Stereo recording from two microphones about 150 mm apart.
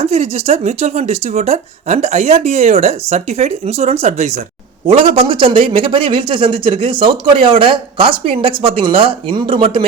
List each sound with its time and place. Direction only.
0.0 s speech: 45° right (ahead or behind)